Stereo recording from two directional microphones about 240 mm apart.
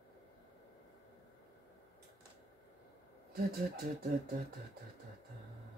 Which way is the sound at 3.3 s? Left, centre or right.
Right.